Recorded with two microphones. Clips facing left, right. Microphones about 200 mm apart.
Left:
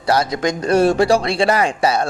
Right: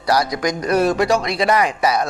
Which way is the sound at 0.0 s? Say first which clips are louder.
Left 1 dB; 25° left (ahead or behind).